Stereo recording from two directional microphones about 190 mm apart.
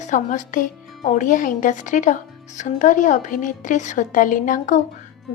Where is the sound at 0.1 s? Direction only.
40° left (ahead or behind).